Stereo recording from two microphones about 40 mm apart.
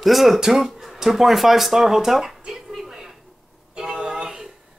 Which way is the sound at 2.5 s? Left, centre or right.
Centre.